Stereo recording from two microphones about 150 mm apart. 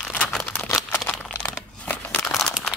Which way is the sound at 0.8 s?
10° left (ahead or behind).